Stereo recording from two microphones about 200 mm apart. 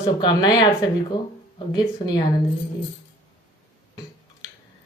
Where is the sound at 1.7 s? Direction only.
20° left (ahead or behind).